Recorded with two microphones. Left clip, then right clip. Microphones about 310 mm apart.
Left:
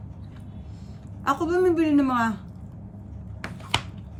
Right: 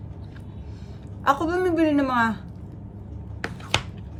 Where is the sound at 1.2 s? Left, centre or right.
Centre.